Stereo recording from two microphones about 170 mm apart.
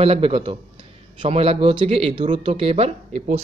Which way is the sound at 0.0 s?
35° right (ahead or behind).